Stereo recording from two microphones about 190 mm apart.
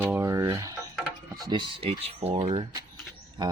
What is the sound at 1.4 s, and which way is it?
A man's voice, 20° right (ahead or behind).